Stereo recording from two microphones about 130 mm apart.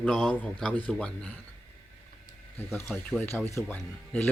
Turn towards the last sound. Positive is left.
turn(degrees=15)  # may be behind; listen again after turning